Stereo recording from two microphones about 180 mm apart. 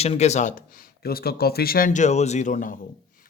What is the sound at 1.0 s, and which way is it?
Speech, 60° left (ahead or behind).